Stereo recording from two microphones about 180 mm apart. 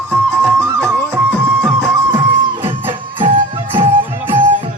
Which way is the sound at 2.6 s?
30° right (ahead or behind).